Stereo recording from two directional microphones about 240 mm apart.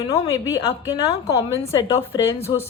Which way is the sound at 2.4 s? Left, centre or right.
Centre.